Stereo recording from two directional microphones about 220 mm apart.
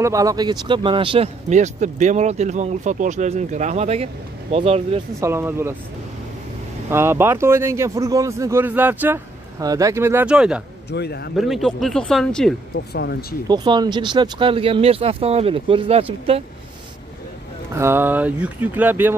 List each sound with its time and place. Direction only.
0.0 s speech: 15° right (ahead or behind)
5.2 s speech: 10° right (ahead or behind)
6.9 s speech: 10° right (ahead or behind)
10.9 s speech: 50° left (ahead or behind)
11.3 s speech: centre (ahead or behind)
12.7 s speech: 50° left (ahead or behind)
13.5 s speech: 20° right (ahead or behind)
17.7 s speech: 10° right (ahead or behind)